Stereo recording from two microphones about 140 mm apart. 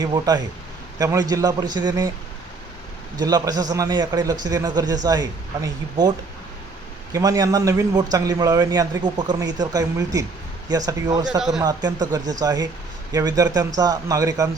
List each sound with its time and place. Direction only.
0.0 s a man's voice: 30° right (ahead or behind)
3.2 s a man's voice: 25° right (ahead or behind)
11.3 s speech: 5° right (ahead or behind)
11.6 s a man's voice: 30° right (ahead or behind)